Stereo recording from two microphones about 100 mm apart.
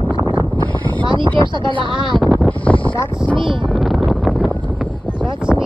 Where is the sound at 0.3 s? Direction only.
50° right (ahead or behind).